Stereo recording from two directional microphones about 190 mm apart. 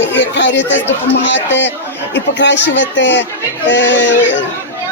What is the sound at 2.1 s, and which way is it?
Speech, 70° left (ahead or behind).